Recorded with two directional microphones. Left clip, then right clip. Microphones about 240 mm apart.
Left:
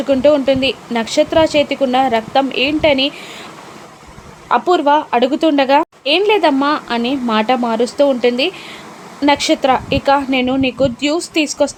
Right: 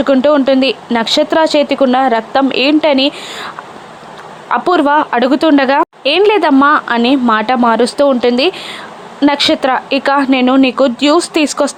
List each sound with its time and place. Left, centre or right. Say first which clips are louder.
0.0 s a woman's voice: right 2 dB; centre